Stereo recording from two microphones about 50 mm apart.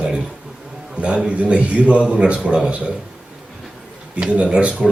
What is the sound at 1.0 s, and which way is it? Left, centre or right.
A man's voice, right.